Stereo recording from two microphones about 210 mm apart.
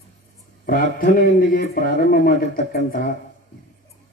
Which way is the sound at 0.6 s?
45° left (ahead or behind).